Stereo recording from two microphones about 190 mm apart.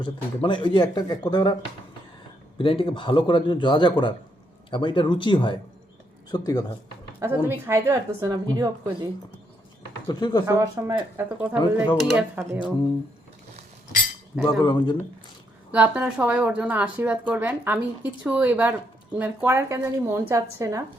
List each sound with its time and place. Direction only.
0.0 s speech: 25° left (ahead or behind)
2.6 s speech: 30° left (ahead or behind)
7.2 s speech: 10° right (ahead or behind)
10.1 s speech: 20° left (ahead or behind)
10.4 s speech: 15° right (ahead or behind); by 12.2 s centre (ahead or behind)
12.4 s speech: 15° right (ahead or behind)
14.6 s speech: 25° left (ahead or behind)
15.7 s speech: 5° right (ahead or behind)